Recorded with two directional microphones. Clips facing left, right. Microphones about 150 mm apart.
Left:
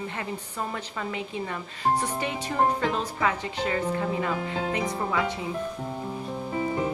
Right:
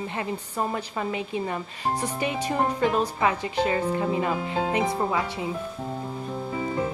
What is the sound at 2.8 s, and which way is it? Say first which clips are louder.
Speech: right 4 dB; 15° right (ahead or behind).